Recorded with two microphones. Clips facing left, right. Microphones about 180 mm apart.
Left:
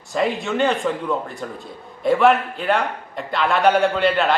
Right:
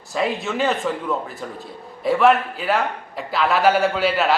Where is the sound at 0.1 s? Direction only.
Centre (ahead or behind).